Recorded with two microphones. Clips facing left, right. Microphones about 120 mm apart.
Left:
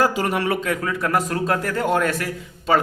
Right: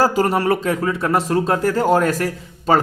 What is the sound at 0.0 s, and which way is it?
Speech, 35° right (ahead or behind).